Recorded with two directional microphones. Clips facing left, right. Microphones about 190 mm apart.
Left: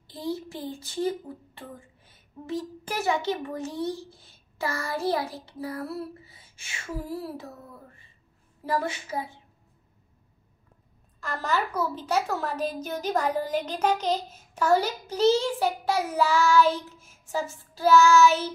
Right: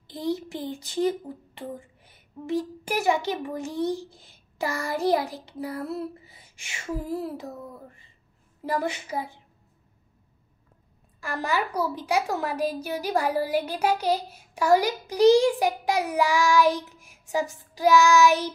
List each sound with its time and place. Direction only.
0.3 s a woman's voice: 15° right (ahead or behind)
8.6 s a woman's voice: 15° right (ahead or behind)
11.1 s a woman's voice: 10° right (ahead or behind)